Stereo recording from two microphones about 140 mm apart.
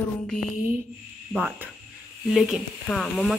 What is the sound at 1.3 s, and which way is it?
Speech, 10° right (ahead or behind).